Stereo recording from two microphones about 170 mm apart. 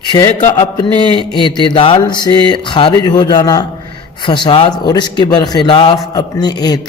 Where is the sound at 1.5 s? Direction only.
30° left (ahead or behind).